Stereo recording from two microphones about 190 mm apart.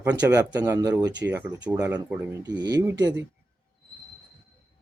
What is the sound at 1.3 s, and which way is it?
Speech, 10° right (ahead or behind).